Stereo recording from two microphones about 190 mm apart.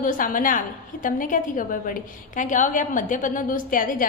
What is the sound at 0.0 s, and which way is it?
A woman's voice, 45° left (ahead or behind).